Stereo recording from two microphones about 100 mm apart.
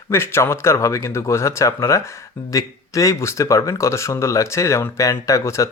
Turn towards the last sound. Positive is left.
turn(degrees=30)  # may be behind; listen again after turning